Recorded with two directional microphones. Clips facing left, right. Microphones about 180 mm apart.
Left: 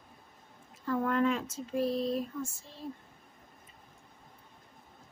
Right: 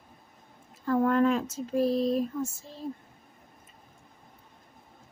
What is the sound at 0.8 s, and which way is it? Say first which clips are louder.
Speech: right 5 dB; 40° right (ahead or behind).